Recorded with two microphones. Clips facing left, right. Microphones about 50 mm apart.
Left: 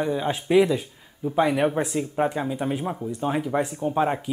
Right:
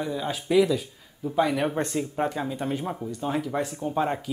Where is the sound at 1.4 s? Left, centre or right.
Centre.